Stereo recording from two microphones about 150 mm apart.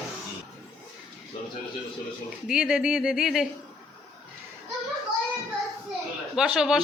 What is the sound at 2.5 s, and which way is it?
Speech, 5° right (ahead or behind).